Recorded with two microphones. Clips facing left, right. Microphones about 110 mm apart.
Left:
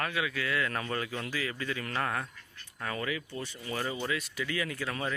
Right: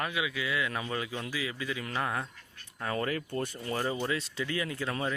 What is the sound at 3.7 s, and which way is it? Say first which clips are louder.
Speech: right 2 dB; 30° right (ahead or behind).